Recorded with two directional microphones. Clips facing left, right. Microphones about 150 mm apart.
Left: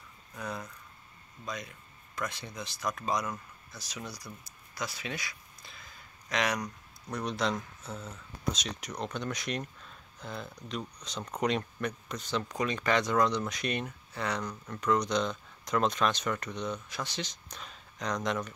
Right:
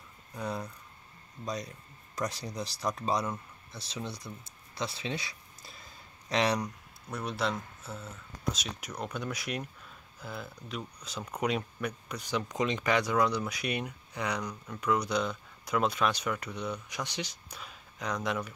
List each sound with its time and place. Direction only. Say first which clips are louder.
0.3 s speech: right 3 dB; 20° right (ahead or behind)
1.4 s speech: right 3 dB; 35° right (ahead or behind)
5.6 s a sound: right 1 dB; 35° right (ahead or behind)
6.6 s speech: right 1 dB; 5° right (ahead or behind)